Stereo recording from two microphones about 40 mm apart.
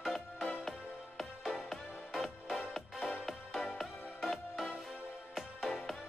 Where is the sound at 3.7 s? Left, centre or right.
Centre.